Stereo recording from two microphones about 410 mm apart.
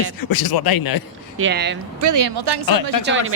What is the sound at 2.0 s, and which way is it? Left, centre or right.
Speech, right.